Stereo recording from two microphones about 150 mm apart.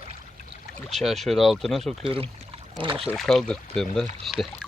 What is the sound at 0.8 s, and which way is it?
Speech, centre (ahead or behind).